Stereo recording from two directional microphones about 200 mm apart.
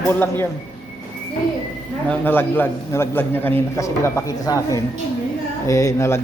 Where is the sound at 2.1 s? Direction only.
10° left (ahead or behind).